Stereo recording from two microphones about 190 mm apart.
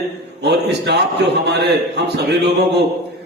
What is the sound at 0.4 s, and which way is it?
Speech, 60° right (ahead or behind).